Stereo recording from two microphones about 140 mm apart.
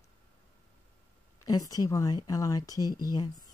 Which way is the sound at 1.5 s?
25° left (ahead or behind).